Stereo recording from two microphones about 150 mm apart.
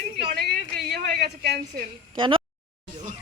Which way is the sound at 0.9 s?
90° right.